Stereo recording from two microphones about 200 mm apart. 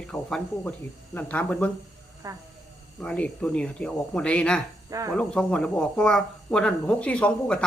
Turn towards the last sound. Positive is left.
turn(degrees=5)  # may be behind; listen again after turning